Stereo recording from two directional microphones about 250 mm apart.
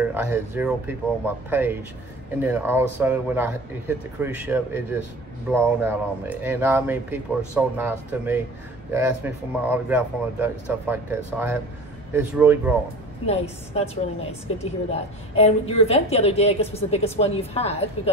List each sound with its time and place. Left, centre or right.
0.0 s speech: centre
13.3 s a woman's voice: left